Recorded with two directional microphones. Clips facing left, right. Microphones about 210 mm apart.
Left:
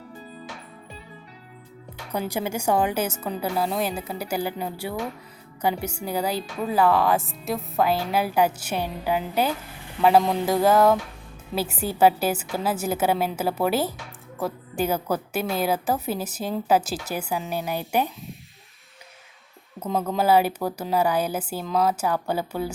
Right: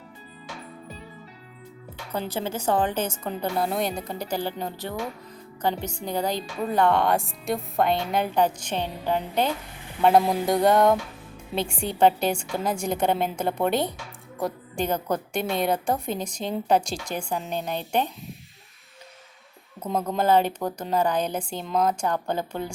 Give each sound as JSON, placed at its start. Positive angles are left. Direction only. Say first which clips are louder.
{"t": 2.1, "sound": "speech", "louder": "left 2 dB", "side_deg": 10}
{"t": 19.9, "sound": "speech", "louder": "left 1 dB", "side_deg": 5}